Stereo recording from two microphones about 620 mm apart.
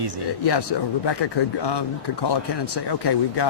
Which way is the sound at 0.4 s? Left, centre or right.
Left.